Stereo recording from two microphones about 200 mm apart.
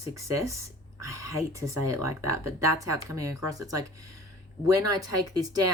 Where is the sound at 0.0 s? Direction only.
15° right (ahead or behind).